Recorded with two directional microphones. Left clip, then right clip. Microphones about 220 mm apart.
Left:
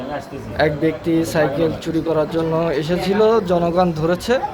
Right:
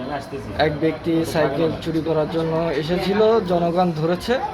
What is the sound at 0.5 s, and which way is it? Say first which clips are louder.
Speech: left 2 dB; 20° left (ahead or behind).